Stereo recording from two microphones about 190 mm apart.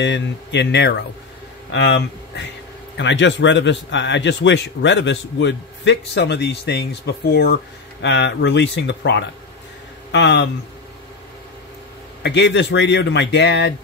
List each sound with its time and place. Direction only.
0.0 s a man's voice: 65° left (ahead or behind)
12.2 s speech: 65° left (ahead or behind)